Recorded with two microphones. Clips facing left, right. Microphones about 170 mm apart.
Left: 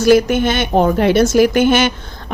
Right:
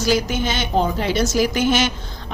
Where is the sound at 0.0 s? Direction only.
55° left (ahead or behind).